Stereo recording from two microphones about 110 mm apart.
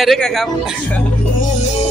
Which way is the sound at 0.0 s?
Centre (ahead or behind).